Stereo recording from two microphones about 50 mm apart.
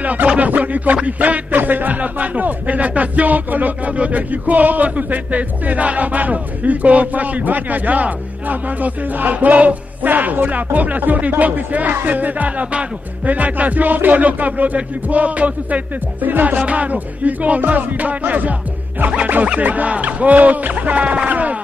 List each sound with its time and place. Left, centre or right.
0.0 s a sound: right
0.4 s speech: right
16.5 s music: right